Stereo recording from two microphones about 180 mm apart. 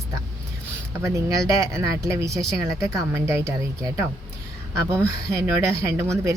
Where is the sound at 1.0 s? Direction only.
15° right (ahead or behind).